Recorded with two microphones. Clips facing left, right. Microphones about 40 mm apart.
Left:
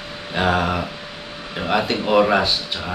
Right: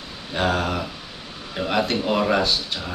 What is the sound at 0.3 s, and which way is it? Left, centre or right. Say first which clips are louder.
Speech: left 3 dB; centre.